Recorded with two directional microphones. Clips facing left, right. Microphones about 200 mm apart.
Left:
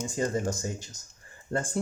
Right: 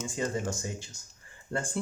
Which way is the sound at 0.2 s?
40° left (ahead or behind).